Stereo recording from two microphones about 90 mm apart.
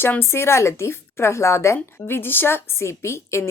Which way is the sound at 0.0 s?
25° left (ahead or behind).